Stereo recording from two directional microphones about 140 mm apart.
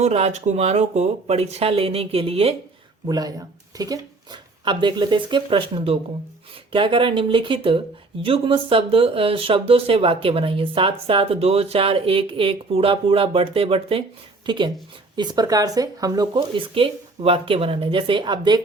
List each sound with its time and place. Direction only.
0.0 s speech: 50° right (ahead or behind)
3.1 s speech: 25° right (ahead or behind)